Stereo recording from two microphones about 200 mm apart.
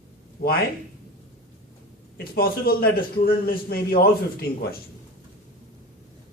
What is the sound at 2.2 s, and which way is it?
A man's voice, 50° left (ahead or behind).